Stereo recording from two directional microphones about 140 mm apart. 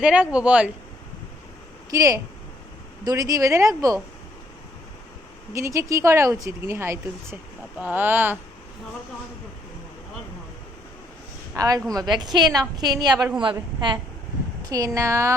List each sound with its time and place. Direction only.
0.0 s speech: 10° right (ahead or behind)
1.9 s speech: 20° right (ahead or behind)
5.5 s speech: 20° right (ahead or behind)
11.5 s a woman's voice: 25° right (ahead or behind)